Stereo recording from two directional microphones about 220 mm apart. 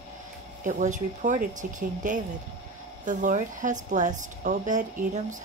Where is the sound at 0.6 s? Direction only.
35° right (ahead or behind).